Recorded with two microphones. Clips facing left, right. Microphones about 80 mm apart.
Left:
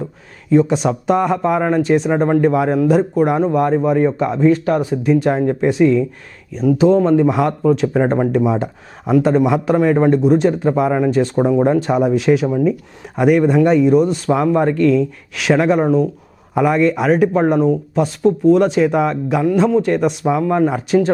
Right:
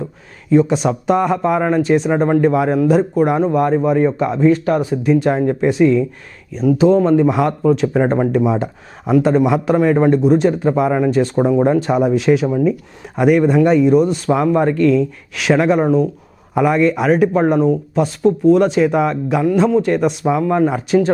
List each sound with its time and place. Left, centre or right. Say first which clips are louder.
0.5 s a man's voice: even; centre